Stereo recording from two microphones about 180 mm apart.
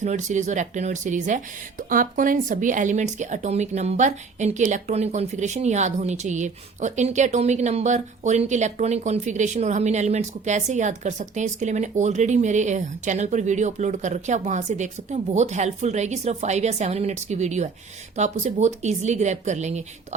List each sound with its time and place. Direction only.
0.0 s speech: 40° right (ahead or behind)